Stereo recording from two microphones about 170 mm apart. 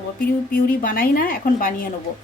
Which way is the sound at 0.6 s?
55° left (ahead or behind).